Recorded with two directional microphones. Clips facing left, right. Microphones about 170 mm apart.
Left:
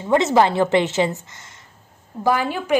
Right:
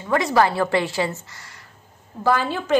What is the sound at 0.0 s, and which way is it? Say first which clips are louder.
A woman's voice: left 3 dB; 20° left (ahead or behind).